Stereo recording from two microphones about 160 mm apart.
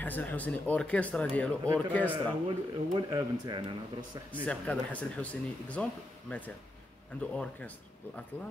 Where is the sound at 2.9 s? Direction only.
25° right (ahead or behind).